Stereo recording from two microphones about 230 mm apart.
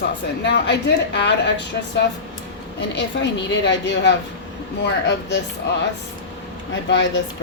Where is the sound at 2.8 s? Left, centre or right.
Left.